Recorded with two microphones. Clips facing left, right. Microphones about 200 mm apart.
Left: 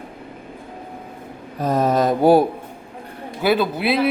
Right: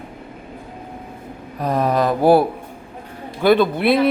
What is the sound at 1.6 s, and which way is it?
Mantra, 40° left (ahead or behind).